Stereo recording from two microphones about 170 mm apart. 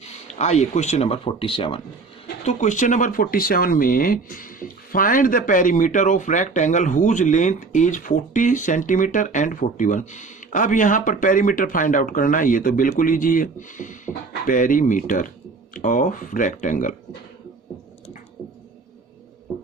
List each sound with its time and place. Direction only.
0.3 s speech: 40° left (ahead or behind)
2.4 s speech: 45° left (ahead or behind)